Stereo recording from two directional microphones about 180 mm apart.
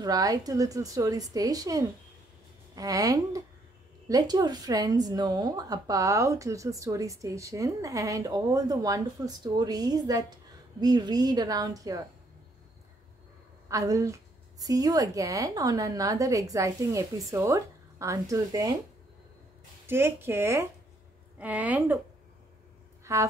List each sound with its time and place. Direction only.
0.0 s speech: 20° right (ahead or behind)
13.7 s a woman's voice: 20° right (ahead or behind)
19.9 s a woman's voice: 10° right (ahead or behind)
23.1 s a woman's voice: 15° right (ahead or behind)